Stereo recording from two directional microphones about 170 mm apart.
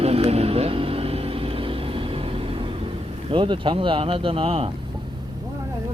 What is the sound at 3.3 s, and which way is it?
Speech, 30° right (ahead or behind).